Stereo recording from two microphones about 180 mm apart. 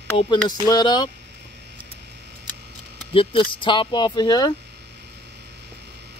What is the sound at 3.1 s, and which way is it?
Speech, 30° left (ahead or behind).